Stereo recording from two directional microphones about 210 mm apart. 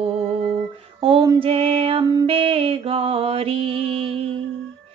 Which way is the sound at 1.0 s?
20° right (ahead or behind).